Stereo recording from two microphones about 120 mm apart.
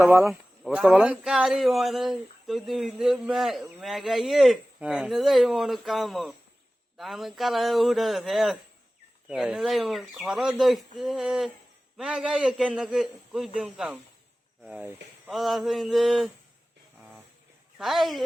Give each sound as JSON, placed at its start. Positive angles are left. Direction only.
{"t": 0.0, "sound": "speech", "side_deg": -20}
{"t": 0.3, "sound": "speech", "side_deg": 0}
{"t": 15.3, "sound": "speech", "side_deg": 0}
{"t": 17.0, "sound": "a sound", "side_deg": -5}
{"t": 17.7, "sound": "speech", "side_deg": 0}